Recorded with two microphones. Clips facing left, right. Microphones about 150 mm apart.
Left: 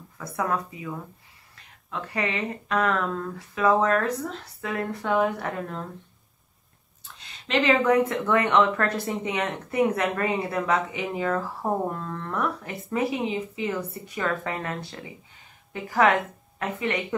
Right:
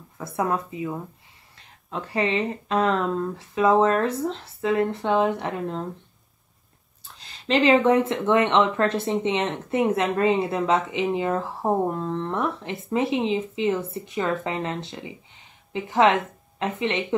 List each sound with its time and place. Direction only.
0.4 s speech: 20° right (ahead or behind)
7.4 s speech: 30° right (ahead or behind)